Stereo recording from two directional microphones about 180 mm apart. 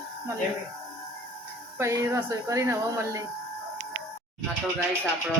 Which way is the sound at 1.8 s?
15° right (ahead or behind).